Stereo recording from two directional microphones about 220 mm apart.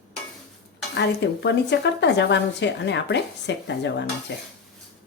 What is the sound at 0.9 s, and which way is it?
Speech, 50° left (ahead or behind).